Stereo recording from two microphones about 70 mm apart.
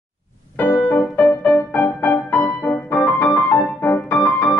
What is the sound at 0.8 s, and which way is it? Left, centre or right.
Music, left.